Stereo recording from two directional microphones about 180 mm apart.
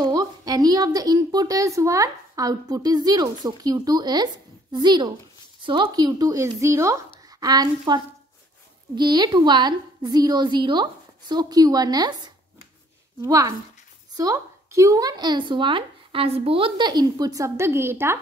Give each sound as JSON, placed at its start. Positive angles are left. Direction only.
{"t": 0.0, "sound": "a woman's voice", "side_deg": -20}
{"t": 13.2, "sound": "a woman's voice", "side_deg": -20}